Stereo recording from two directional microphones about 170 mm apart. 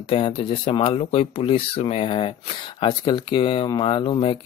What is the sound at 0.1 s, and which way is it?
Speech, 35° left (ahead or behind).